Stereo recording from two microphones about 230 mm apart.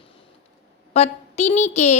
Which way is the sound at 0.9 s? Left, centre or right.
Left.